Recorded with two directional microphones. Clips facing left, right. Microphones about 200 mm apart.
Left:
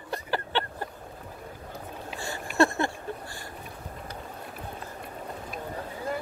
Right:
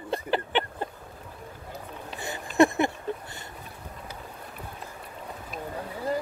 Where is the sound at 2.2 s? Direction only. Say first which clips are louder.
Right 3 dB; 20° right (ahead or behind).